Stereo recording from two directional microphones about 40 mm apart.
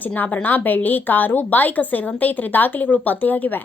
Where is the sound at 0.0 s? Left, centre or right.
Left.